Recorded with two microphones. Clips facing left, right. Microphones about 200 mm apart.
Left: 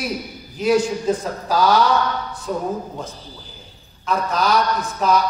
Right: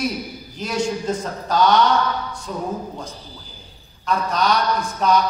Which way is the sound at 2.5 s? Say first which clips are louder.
Left 5 dB; 45° left (ahead or behind).